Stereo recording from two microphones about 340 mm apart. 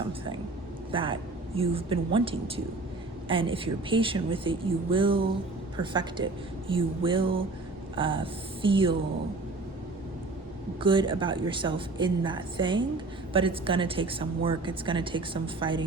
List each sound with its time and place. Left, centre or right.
0.9 s a woman's voice: centre
10.8 s a woman's voice: centre